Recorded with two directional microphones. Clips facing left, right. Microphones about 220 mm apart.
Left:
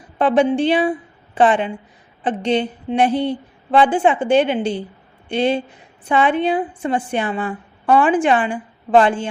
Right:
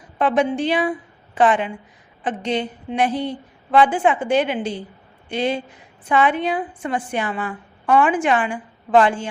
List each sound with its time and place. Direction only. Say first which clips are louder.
0.2 s a woman's voice: left 4 dB; 30° left (ahead or behind)